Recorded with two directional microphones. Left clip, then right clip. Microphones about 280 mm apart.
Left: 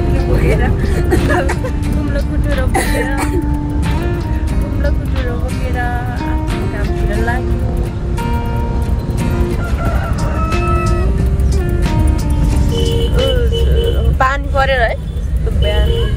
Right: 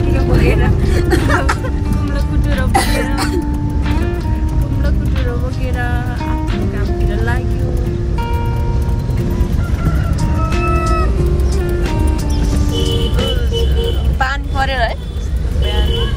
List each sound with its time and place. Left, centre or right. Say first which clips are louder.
0.6 s speech: even; centre
2.8 s speech: even; centre
10.5 s music: right 1 dB; centre
12.7 s music: left 3 dB; centre
14.1 s a sound: left 5 dB; centre